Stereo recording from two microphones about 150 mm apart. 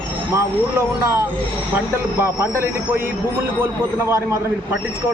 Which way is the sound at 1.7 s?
15° right (ahead or behind).